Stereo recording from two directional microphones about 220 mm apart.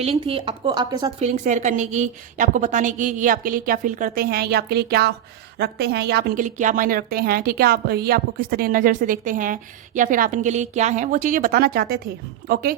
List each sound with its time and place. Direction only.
0.0 s speech: 25° right (ahead or behind)
1.2 s a woman's voice: 30° right (ahead or behind)